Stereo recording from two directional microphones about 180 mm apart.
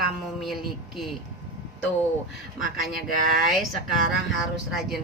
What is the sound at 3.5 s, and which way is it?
A woman's voice, centre (ahead or behind).